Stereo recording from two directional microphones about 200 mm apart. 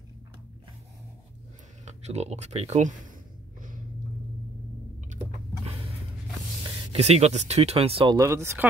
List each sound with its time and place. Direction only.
1.9 s speech: 35° right (ahead or behind)
6.6 s speech: 30° right (ahead or behind)
8.2 s speech: 15° right (ahead or behind)